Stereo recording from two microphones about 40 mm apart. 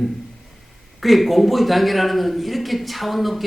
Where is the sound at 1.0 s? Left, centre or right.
Centre.